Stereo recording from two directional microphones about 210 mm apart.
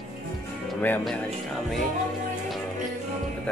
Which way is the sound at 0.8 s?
5° left (ahead or behind).